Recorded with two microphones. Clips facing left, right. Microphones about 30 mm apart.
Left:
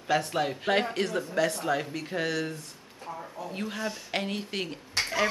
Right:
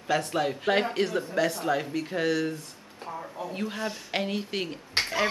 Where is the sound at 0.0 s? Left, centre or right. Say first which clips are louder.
Right 1 dB; centre.